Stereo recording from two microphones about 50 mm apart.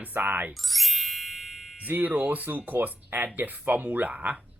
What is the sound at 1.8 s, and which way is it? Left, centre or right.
Speech, right.